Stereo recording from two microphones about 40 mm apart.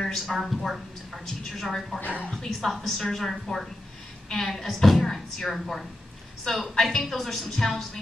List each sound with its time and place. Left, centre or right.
0.0 s a woman's voice: centre
2.0 s a woman's voice: left
2.7 s a woman's voice: centre
7.4 s a woman's voice: centre